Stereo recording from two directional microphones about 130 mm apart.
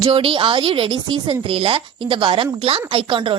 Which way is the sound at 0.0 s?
40° right (ahead or behind).